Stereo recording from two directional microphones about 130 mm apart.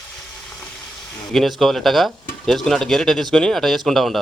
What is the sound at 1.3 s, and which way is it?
Speech, centre (ahead or behind).